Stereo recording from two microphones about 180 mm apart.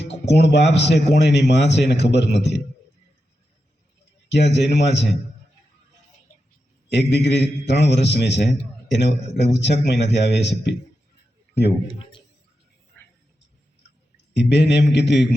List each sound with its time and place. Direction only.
0.3 s a man's voice: 70° left (ahead or behind)
4.3 s a man's voice: 70° left (ahead or behind)
6.9 s a man's voice: 70° left (ahead or behind)
11.5 s a man's voice: 25° left (ahead or behind)
14.3 s a man's voice: 70° left (ahead or behind)